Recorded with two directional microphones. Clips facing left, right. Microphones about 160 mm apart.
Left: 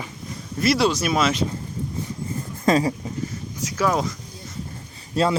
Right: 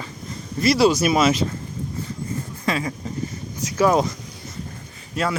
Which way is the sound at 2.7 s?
35° left (ahead or behind).